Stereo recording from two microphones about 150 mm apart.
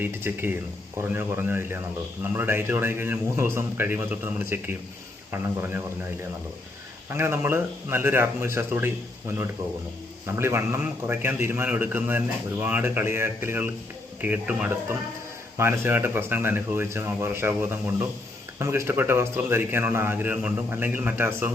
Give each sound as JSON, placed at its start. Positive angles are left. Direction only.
{"t": 0.0, "sound": "a man's voice", "side_deg": -15}
{"t": 10.3, "sound": "a man's voice", "side_deg": -15}